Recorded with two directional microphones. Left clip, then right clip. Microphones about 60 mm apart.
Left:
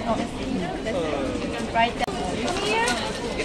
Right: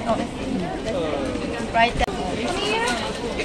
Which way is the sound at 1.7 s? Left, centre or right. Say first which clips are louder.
Right 3 dB; right.